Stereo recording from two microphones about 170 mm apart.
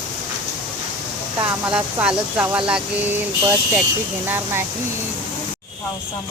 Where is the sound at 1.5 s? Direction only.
10° right (ahead or behind).